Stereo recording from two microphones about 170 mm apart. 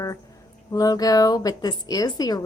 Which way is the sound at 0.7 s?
20° left (ahead or behind).